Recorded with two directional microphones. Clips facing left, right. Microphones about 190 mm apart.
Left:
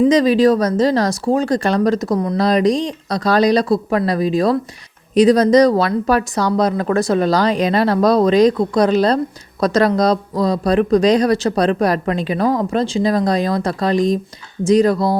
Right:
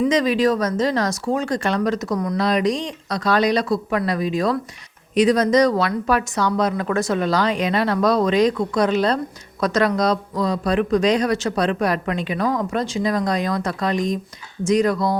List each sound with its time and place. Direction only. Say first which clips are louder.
0.0 s speech: left 6 dB; 35° left (ahead or behind)